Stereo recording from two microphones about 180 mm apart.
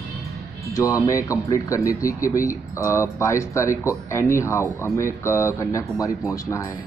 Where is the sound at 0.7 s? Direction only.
15° left (ahead or behind).